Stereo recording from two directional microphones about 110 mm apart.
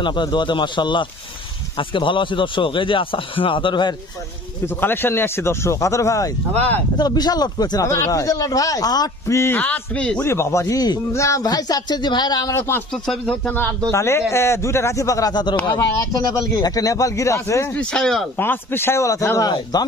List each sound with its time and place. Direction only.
0.0 s speech: 45° left (ahead or behind)
4.7 s speech: 20° left (ahead or behind)
10.2 s speech: 25° left (ahead or behind)
12.9 s speech: 5° left (ahead or behind)
13.3 s speech: 15° left (ahead or behind)
17.7 s speech: 5° left (ahead or behind)
18.4 s speech: 20° left (ahead or behind)